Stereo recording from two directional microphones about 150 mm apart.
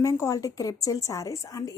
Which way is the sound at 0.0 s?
20° left (ahead or behind).